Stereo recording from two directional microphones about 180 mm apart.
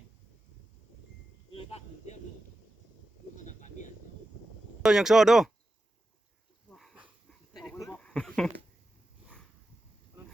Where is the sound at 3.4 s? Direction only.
45° left (ahead or behind).